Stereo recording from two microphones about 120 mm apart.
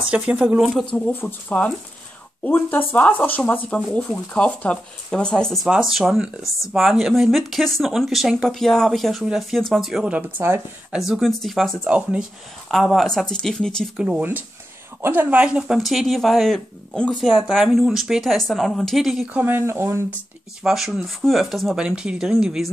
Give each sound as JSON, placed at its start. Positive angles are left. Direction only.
{"t": 0.1, "sound": "speech", "side_deg": -10}
{"t": 0.8, "sound": "speech", "side_deg": 10}
{"t": 10.9, "sound": "speech", "side_deg": -5}
{"t": 12.6, "sound": "speech", "side_deg": 0}
{"t": 13.9, "sound": "speech", "side_deg": -10}
{"t": 17.5, "sound": "speech", "side_deg": -5}
{"t": 19.2, "sound": "speech", "side_deg": -15}
{"t": 20.6, "sound": "speech", "side_deg": 0}